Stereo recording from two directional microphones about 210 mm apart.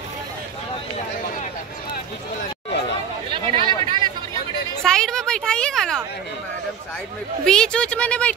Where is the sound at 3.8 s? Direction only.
20° right (ahead or behind).